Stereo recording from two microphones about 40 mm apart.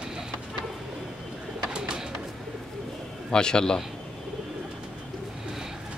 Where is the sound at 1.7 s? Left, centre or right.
Right.